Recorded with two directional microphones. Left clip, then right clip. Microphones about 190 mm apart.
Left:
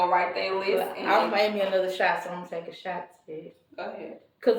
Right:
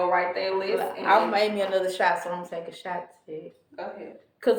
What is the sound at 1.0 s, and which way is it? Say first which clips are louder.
A woman's voice: right 3 dB; 15° right (ahead or behind).